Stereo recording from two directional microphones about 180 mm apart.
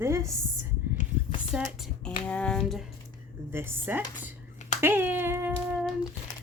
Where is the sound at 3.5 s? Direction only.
10° right (ahead or behind).